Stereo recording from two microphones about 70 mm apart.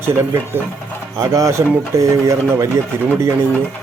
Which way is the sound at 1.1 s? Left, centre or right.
Right.